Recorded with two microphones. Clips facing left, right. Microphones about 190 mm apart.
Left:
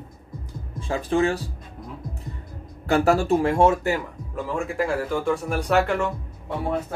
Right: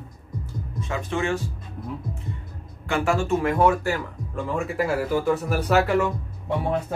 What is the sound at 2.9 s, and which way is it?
Speech, 40° left (ahead or behind).